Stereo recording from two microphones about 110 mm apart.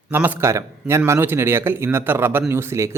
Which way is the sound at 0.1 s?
15° right (ahead or behind).